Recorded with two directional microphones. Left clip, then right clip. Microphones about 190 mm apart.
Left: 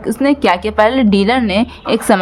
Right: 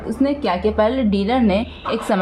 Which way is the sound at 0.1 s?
50° left (ahead or behind).